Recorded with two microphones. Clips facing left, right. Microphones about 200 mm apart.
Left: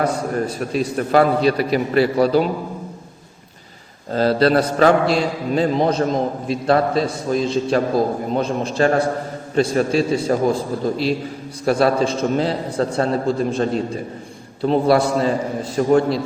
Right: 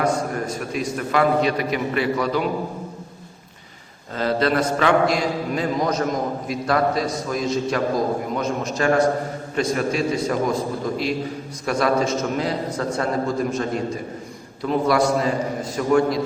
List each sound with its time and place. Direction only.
0.0 s a man's voice: 35° left (ahead or behind)
4.1 s a man's voice: 35° left (ahead or behind)